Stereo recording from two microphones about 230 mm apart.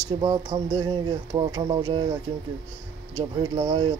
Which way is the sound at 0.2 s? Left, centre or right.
Centre.